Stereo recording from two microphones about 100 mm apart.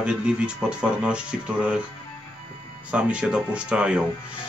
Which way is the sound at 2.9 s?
10° right (ahead or behind).